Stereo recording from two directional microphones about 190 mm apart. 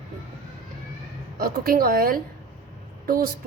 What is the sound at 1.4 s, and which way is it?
A woman's voice, 50° right (ahead or behind).